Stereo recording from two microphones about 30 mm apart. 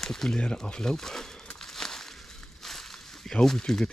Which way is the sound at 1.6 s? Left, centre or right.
Centre.